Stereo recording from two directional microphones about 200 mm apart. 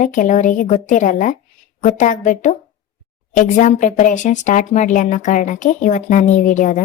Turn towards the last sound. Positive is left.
turn(degrees=40)  # may be behind; listen again after turning